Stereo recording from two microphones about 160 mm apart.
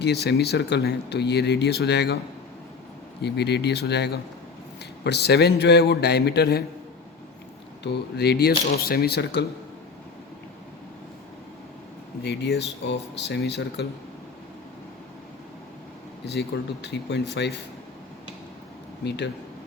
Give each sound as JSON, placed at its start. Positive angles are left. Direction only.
{"t": 0.0, "sound": "speech", "side_deg": 90}
{"t": 3.2, "sound": "speech", "side_deg": 90}
{"t": 7.9, "sound": "speech", "side_deg": 90}
{"t": 12.2, "sound": "speech", "side_deg": 90}
{"t": 16.2, "sound": "speech", "side_deg": 90}
{"t": 19.0, "sound": "speech", "side_deg": 90}